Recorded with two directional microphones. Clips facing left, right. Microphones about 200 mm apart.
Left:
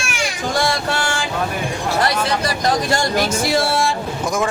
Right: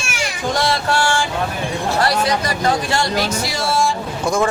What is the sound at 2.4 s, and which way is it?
Speech, 40° left (ahead or behind).